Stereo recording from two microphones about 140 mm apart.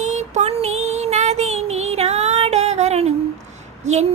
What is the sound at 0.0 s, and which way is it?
Child singing, 55° right (ahead or behind).